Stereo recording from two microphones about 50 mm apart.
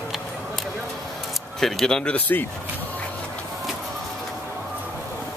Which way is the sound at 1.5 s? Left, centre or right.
Centre.